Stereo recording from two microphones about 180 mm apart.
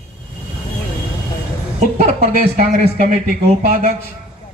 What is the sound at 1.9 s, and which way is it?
A man's voice, 45° right (ahead or behind).